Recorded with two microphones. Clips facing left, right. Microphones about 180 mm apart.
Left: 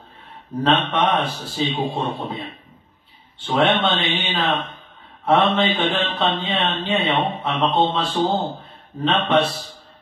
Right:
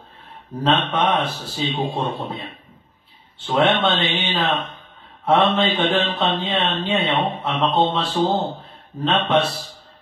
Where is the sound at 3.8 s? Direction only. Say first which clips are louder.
Right 1 dB; centre (ahead or behind).